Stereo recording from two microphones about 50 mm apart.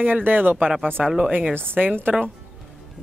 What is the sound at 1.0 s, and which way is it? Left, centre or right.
Speech, centre.